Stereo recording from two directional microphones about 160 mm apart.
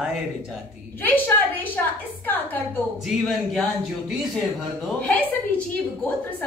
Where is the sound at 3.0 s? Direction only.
Centre (ahead or behind).